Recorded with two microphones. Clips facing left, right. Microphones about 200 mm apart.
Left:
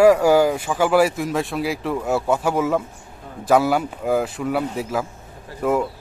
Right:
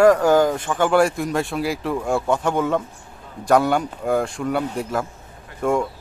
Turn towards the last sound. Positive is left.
turn(degrees=5)  # may be behind; listen again after turning